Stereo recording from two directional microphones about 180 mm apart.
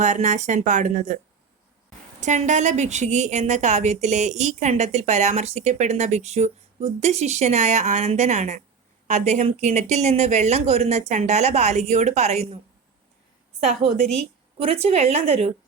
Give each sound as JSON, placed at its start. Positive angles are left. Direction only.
{"t": 0.0, "sound": "a woman's voice", "side_deg": -40}
{"t": 2.2, "sound": "a woman's voice", "side_deg": -40}
{"t": 14.6, "sound": "a woman's voice", "side_deg": -35}